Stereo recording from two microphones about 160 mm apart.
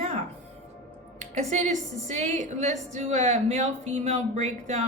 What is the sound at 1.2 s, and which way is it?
A woman's voice, 45° right (ahead or behind).